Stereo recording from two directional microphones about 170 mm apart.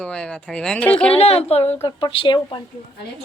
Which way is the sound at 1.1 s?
35° left (ahead or behind).